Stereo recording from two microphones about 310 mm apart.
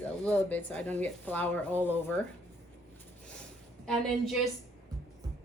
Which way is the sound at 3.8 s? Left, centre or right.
Centre.